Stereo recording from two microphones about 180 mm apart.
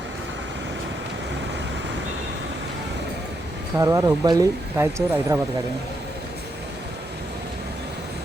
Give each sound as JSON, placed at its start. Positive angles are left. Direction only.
{"t": 3.8, "sound": "speech", "side_deg": -20}